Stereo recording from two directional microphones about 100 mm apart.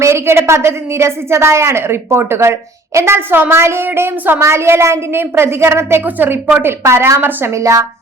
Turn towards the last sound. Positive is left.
turn(degrees=-30)  # may be behind; listen again after turning